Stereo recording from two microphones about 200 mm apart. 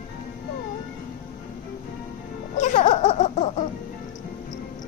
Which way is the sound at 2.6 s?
35° left (ahead or behind).